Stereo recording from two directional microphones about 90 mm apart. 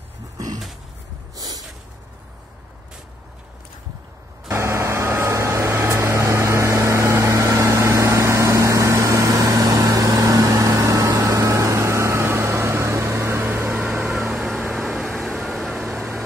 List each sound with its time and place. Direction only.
1.3 s snort: 45° right (ahead or behind)
4.5 s vehicle: 30° right (ahead or behind)
13.7 s vehicle: 10° right (ahead or behind)